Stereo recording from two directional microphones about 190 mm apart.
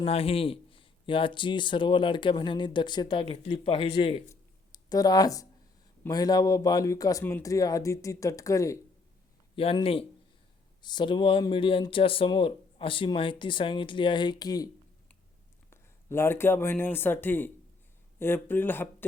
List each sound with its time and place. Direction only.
0.0 s speech: 30° left (ahead or behind)
4.3 s a sound: 20° left (ahead or behind)
6.0 s speech: 20° left (ahead or behind)
9.6 s speech: 30° left (ahead or behind)
15.7 s speech: 15° left (ahead or behind)